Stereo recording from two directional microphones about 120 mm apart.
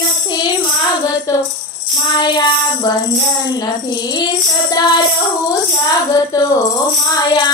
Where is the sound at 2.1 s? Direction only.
35° left (ahead or behind).